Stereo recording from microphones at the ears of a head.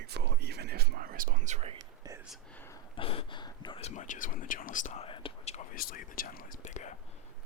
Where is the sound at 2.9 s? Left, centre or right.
Left.